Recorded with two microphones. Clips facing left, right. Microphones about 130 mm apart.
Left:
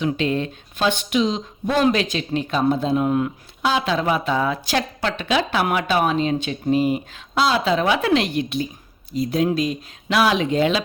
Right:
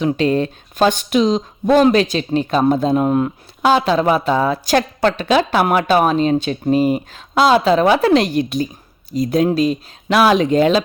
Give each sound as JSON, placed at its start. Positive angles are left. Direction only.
{"t": 0.0, "sound": "speech", "side_deg": -40}